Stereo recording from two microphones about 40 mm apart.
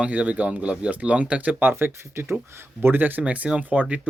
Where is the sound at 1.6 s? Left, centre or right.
Right.